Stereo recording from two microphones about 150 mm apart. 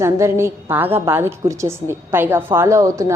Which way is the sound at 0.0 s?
20° right (ahead or behind).